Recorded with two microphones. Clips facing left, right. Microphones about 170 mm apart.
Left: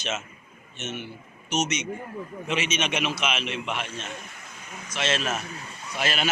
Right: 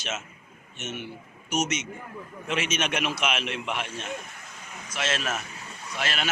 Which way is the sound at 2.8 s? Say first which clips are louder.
Even; 5° right (ahead or behind).